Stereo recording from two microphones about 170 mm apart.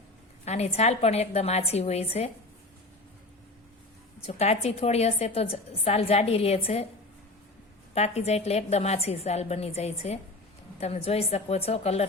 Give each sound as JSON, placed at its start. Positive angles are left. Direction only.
{"t": 0.4, "sound": "a woman's voice", "side_deg": 40}
{"t": 4.3, "sound": "a woman's voice", "side_deg": 40}
{"t": 7.9, "sound": "a woman's voice", "side_deg": 40}